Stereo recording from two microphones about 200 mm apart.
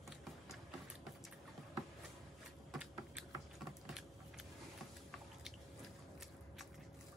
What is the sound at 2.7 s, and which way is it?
Typing, 5° right (ahead or behind).